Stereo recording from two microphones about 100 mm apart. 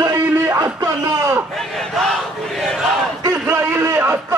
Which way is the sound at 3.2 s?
30° right (ahead or behind).